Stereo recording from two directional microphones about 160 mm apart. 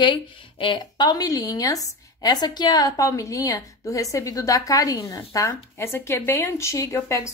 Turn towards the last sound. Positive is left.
turn(degrees=20)  # may be behind; listen again after turning